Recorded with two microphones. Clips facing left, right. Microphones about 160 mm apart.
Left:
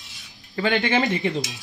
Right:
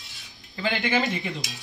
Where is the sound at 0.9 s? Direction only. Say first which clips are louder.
Left 3 dB; 20° left (ahead or behind).